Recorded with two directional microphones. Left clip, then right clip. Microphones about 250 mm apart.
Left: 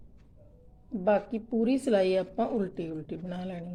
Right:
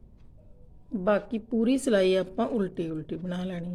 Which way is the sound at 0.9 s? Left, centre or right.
Centre.